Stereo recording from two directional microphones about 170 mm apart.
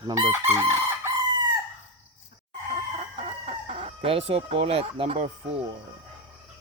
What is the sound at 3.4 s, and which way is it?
Speech, 35° right (ahead or behind).